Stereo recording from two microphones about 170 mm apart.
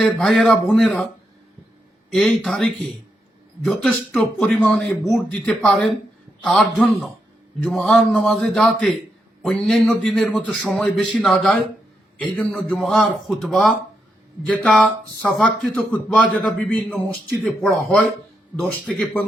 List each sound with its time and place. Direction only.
0.0 s a man's voice: centre (ahead or behind)
2.0 s a man's voice: centre (ahead or behind)
18.9 s a man's voice: 5° left (ahead or behind)